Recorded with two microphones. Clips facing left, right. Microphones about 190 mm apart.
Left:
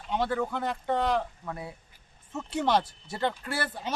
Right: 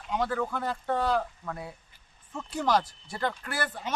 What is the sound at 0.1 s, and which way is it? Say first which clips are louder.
Speech: left 1 dB; 30° left (ahead or behind).